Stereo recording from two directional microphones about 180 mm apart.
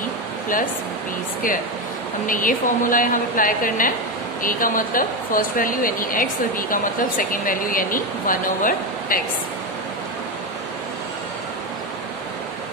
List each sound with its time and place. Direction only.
2.2 s speech: 50° left (ahead or behind)